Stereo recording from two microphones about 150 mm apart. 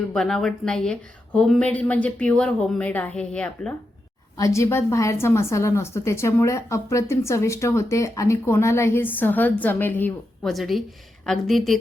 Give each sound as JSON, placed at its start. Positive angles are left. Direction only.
{"t": 0.1, "sound": "a woman's voice", "side_deg": 5}
{"t": 4.4, "sound": "a woman's voice", "side_deg": 20}
{"t": 10.4, "sound": "a woman's voice", "side_deg": 0}